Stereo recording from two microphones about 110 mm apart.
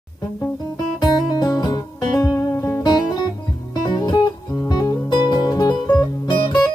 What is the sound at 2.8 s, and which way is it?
Guitar, 40° left (ahead or behind).